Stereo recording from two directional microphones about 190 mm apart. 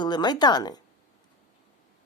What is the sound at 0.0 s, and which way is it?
Speech, 20° left (ahead or behind).